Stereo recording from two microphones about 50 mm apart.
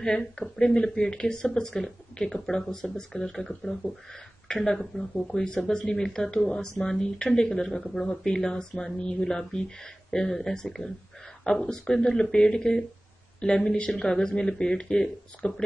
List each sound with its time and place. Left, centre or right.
0.0 s speech: centre
7.6 s speech: centre